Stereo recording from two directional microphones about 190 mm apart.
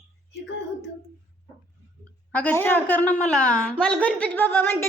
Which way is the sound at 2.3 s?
10° left (ahead or behind).